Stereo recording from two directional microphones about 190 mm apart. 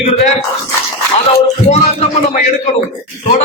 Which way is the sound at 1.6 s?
35° left (ahead or behind).